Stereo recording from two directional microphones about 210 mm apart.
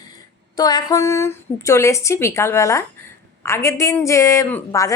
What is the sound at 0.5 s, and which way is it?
Speech, 15° left (ahead or behind).